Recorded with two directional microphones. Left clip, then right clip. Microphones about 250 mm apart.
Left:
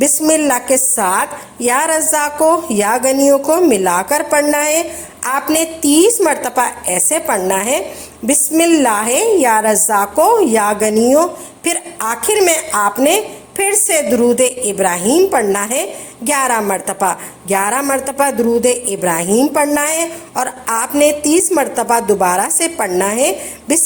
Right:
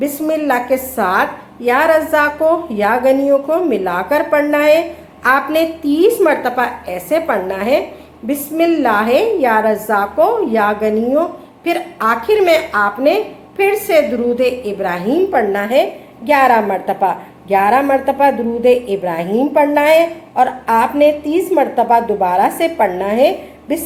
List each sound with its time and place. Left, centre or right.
0.0 s a woman's voice: left